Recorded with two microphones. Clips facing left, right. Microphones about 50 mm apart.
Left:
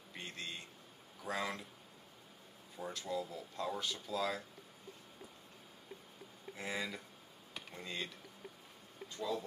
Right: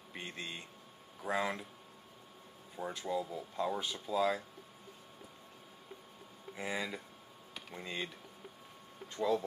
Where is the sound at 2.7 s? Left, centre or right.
Centre.